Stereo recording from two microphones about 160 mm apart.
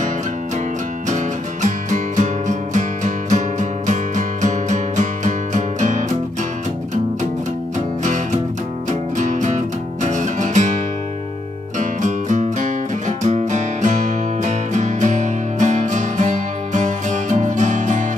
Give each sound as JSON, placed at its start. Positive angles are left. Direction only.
{"t": 1.0, "sound": "music", "side_deg": -50}
{"t": 8.0, "sound": "music", "side_deg": -50}
{"t": 11.8, "sound": "music", "side_deg": -50}